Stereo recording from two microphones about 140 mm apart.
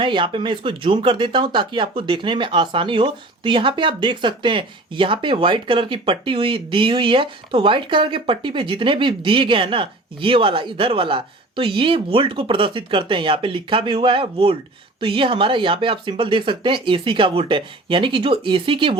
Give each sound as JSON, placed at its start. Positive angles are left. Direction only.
{"t": 0.0, "sound": "speech", "side_deg": -35}